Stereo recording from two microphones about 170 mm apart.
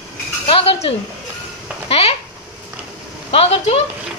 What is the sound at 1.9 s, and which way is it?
Speech, 35° left (ahead or behind).